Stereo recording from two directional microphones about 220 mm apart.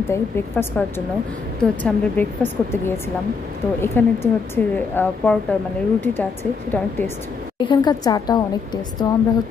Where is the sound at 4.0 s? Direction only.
10° left (ahead or behind).